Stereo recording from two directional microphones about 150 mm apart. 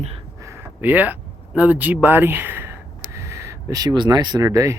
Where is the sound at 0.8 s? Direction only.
10° right (ahead or behind).